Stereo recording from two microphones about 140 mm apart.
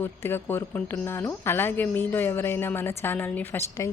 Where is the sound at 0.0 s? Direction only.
15° left (ahead or behind).